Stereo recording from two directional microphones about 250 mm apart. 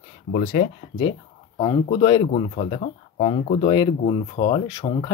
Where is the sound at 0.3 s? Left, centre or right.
Left.